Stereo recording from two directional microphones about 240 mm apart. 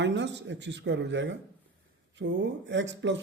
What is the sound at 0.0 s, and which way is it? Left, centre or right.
Speech, right.